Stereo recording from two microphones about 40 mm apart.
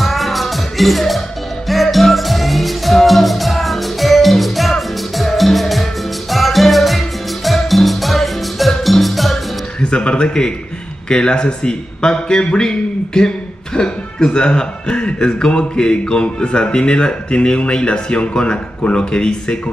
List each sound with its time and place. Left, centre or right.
0.0 s music: centre
9.8 s speech: left